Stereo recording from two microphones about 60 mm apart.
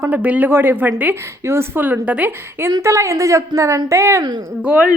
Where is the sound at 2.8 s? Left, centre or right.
Right.